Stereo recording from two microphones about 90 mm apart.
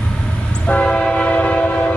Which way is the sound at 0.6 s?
15° left (ahead or behind).